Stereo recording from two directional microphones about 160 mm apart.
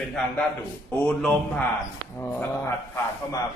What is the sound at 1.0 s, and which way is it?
A man's voice, 5° left (ahead or behind).